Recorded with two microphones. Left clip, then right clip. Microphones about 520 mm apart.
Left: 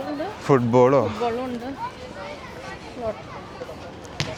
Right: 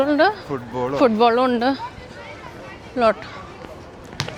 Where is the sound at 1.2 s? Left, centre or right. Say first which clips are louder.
Right 10 dB; right.